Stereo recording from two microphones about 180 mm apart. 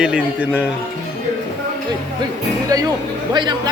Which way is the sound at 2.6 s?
20° right (ahead or behind).